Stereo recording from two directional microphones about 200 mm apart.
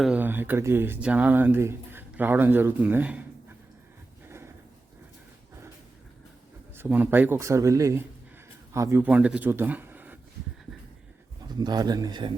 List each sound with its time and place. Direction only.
0.0 s speech: 5° right (ahead or behind)
4.3 s a sound: 10° right (ahead or behind)
6.7 s speech: 10° right (ahead or behind)
11.4 s a man's voice: 20° right (ahead or behind)